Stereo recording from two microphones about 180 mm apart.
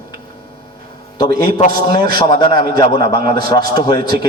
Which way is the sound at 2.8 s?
25° left (ahead or behind).